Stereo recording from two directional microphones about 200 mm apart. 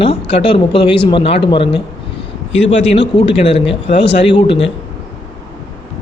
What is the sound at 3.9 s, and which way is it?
Speech, 55° left (ahead or behind).